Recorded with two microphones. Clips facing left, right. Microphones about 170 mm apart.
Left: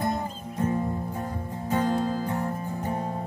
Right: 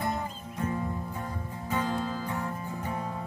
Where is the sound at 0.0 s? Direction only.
40° left (ahead or behind).